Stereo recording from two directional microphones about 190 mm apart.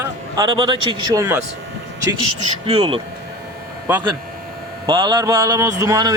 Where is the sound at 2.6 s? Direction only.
30° right (ahead or behind).